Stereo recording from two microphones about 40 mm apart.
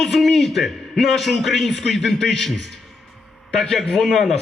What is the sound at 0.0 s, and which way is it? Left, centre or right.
A man's voice, centre.